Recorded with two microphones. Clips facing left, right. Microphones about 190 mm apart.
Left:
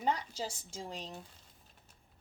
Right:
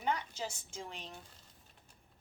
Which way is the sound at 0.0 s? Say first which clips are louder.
Left 2 dB; 35° left (ahead or behind).